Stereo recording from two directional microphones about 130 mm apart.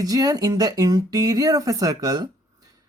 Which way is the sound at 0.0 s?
30° right (ahead or behind).